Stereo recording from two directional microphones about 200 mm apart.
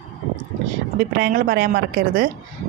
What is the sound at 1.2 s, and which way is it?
A woman's voice, 45° right (ahead or behind).